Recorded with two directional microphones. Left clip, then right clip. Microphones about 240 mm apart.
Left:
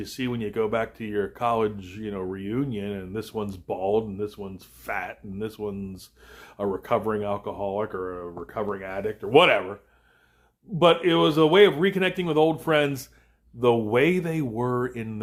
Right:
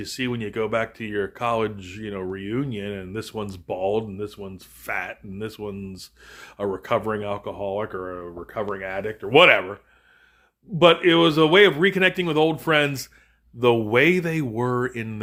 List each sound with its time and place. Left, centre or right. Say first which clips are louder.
0.0 s speech: right 2 dB; right
10.8 s speech: right 3 dB; right